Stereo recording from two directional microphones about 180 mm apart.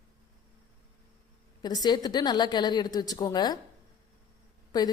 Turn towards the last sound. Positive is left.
turn(degrees=20)  # may be behind; listen again after turning